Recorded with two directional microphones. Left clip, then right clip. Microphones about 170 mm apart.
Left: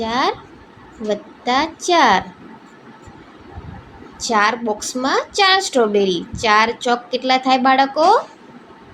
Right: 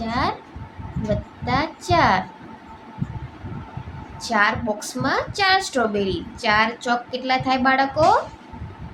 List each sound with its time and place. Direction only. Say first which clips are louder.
0.0 s a woman's voice: left 5 dB; 20° left (ahead or behind)
4.2 s a woman's voice: left 3 dB; 20° left (ahead or behind)